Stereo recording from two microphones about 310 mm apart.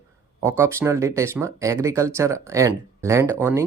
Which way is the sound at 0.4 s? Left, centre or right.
Centre.